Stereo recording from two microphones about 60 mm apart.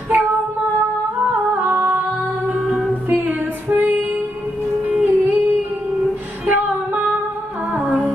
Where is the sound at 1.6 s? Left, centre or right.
Right.